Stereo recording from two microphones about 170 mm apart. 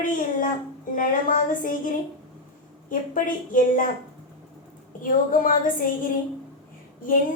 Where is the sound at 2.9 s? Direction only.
50° left (ahead or behind).